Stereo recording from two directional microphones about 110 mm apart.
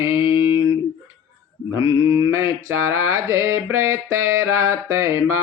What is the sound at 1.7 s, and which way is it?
Mantra, 30° right (ahead or behind).